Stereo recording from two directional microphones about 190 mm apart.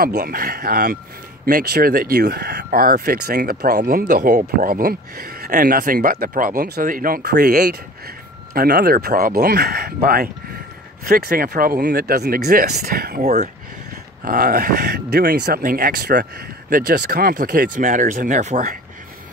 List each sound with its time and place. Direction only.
0.0 s speech: 50° right (ahead or behind)